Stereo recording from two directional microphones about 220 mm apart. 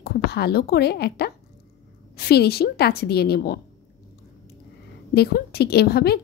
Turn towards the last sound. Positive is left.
turn(degrees=45)  # may be behind; listen again after turning